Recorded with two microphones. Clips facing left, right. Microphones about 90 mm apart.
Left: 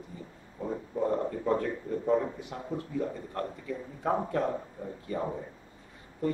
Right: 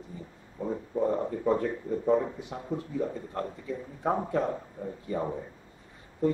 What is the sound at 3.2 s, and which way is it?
Speech, 20° right (ahead or behind).